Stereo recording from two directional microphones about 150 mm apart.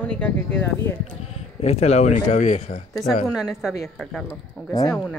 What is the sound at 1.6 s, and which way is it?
Speech, 45° left (ahead or behind).